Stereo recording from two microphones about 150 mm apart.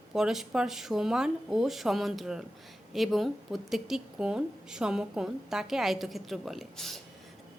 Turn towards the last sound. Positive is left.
turn(degrees=0)  # may be behind; listen again after turning